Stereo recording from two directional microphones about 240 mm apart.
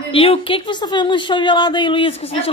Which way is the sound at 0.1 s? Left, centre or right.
Left.